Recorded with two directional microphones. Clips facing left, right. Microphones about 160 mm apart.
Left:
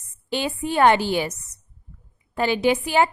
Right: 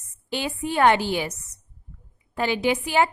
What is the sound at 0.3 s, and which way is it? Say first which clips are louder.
A woman's voice: left 2 dB; 30° left (ahead or behind).